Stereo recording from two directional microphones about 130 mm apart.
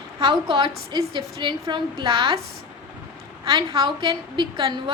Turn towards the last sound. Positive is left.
turn(degrees=-40)  # may be behind; listen again after turning